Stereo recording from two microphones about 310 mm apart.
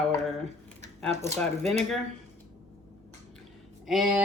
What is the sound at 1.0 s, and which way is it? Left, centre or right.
Speech, centre.